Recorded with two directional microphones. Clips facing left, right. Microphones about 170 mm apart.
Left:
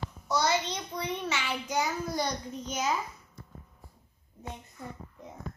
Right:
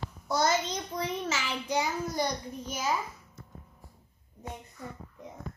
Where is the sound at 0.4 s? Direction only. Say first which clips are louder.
Right 1 dB; 45° right (ahead or behind).